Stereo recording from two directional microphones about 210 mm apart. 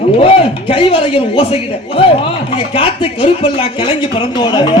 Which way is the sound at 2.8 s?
25° left (ahead or behind).